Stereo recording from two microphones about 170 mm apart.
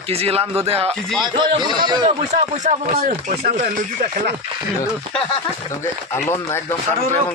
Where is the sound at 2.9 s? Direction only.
50° right (ahead or behind).